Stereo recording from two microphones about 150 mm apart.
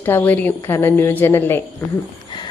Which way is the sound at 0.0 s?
15° left (ahead or behind).